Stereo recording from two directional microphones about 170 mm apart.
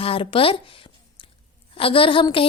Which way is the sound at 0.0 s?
30° left (ahead or behind).